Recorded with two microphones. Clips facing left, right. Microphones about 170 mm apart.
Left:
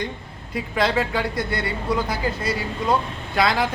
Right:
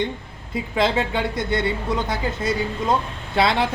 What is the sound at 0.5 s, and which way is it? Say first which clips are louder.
Speech: right 1 dB; 25° right (ahead or behind).